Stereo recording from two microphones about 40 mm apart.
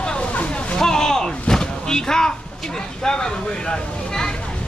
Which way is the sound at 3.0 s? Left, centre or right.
Centre.